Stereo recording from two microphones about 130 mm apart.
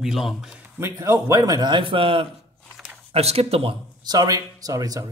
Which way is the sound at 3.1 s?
50° right (ahead or behind).